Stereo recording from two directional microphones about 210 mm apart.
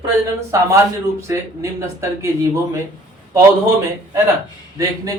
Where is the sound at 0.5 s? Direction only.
15° right (ahead or behind).